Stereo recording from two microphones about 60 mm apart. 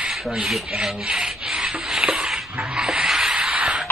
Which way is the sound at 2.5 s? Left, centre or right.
Centre.